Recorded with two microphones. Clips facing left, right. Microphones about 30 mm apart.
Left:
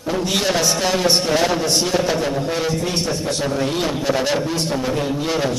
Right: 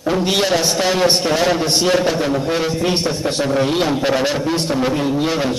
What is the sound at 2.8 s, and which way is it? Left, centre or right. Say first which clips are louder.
A man's voice: right 3 dB; right.